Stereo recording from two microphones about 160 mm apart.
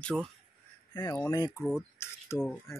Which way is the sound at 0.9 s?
20° left (ahead or behind).